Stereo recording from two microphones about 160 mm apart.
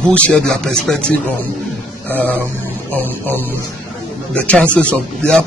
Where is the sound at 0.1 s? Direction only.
10° left (ahead or behind).